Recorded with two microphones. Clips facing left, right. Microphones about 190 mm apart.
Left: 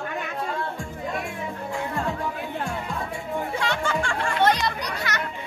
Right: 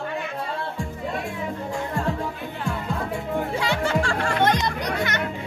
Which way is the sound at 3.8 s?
35° right (ahead or behind).